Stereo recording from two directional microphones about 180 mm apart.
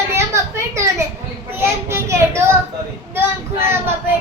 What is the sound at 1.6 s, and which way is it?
Speech, 15° right (ahead or behind).